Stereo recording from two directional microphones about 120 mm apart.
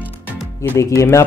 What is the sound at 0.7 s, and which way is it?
Speech, 25° left (ahead or behind).